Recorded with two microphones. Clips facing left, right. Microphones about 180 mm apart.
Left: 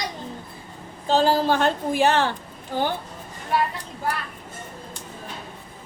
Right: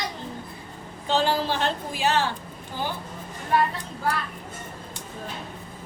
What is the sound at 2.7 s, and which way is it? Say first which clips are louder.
Speech: left 7 dB; 70° left (ahead or behind).